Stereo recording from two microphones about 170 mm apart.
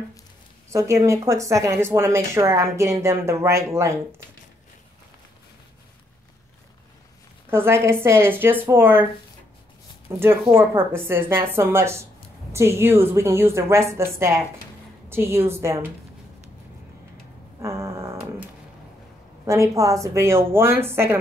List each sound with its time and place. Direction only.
0.7 s speech: 15° right (ahead or behind)
7.4 s speech: 15° right (ahead or behind)
10.0 s speech: 15° right (ahead or behind)
17.6 s dog: 15° right (ahead or behind)
19.4 s speech: 15° right (ahead or behind)